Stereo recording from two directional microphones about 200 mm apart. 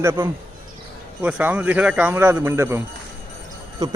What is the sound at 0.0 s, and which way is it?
A man's voice, 15° right (ahead or behind).